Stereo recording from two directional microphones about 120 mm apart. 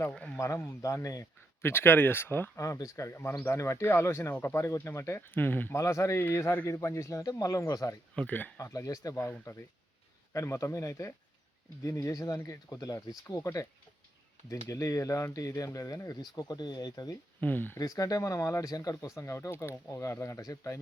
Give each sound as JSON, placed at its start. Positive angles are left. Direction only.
{"t": 0.1, "sound": "speech", "side_deg": 10}
{"t": 0.3, "sound": "speech", "side_deg": 25}
{"t": 8.1, "sound": "speech", "side_deg": 10}
{"t": 8.5, "sound": "speech", "side_deg": 25}
{"t": 14.7, "sound": "speech", "side_deg": 25}
{"t": 17.4, "sound": "speech", "side_deg": 15}
{"t": 17.7, "sound": "speech", "side_deg": 30}